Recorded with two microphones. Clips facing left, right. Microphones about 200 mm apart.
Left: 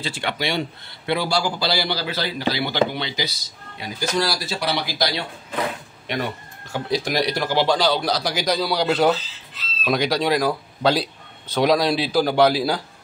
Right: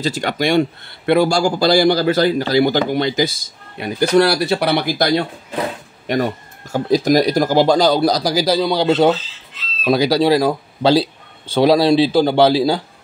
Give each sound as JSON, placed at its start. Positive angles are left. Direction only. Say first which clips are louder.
{"t": 0.0, "sound": "speech", "louder": "right 7 dB", "side_deg": -40}